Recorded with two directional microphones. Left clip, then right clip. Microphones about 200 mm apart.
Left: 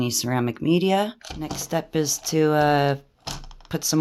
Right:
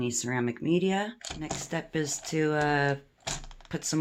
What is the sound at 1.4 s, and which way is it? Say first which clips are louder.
Speech: left 8 dB; 25° left (ahead or behind).